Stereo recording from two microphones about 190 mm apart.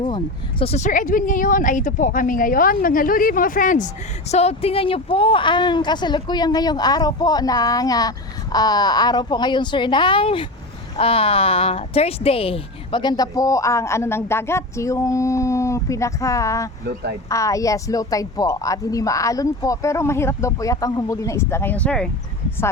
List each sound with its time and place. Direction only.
0.6 s speech: 35° left (ahead or behind)
4.3 s a woman's voice: 35° left (ahead or behind); by 16.6 s 15° left (ahead or behind)
16.8 s speech: 60° right (ahead or behind)
17.2 s a woman's voice: 15° left (ahead or behind)